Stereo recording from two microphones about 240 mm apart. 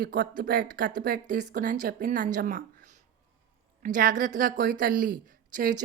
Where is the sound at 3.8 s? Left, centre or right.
Right.